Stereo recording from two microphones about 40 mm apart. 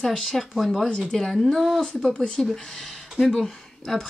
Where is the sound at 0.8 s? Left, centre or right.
Left.